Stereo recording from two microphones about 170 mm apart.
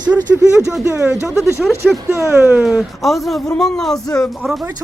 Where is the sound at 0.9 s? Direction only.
15° right (ahead or behind).